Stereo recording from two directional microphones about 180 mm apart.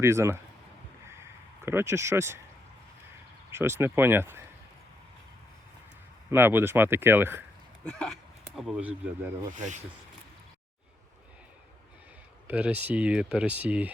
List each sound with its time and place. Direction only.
0.0 s speech: 15° right (ahead or behind)
1.0 s a sound: 15° right (ahead or behind)
3.5 s speech: 15° right (ahead or behind)
6.3 s speech: 10° right (ahead or behind)
7.9 s speech: 5° left (ahead or behind)
9.5 s speech: 45° right (ahead or behind)
12.5 s speech: 10° right (ahead or behind)